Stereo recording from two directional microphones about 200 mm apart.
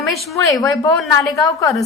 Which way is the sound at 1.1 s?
15° left (ahead or behind).